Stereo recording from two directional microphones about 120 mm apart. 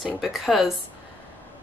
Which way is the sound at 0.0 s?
Centre (ahead or behind).